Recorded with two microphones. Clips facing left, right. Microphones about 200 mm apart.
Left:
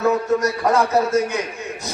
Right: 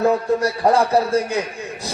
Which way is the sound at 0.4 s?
30° right (ahead or behind).